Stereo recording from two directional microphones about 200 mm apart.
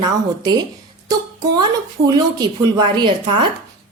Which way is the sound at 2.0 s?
20° right (ahead or behind).